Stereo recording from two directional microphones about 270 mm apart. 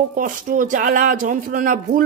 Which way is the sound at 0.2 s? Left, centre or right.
Right.